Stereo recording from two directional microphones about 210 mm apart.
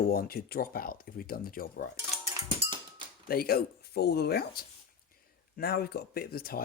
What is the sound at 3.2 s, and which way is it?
Speech, 45° left (ahead or behind).